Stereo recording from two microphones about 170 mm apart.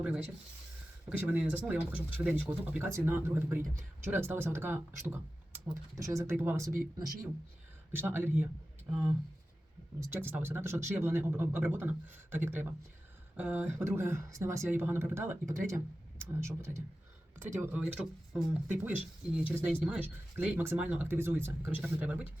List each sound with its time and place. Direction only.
1.2 s speech: 10° right (ahead or behind)
7.9 s speech: 15° right (ahead or behind)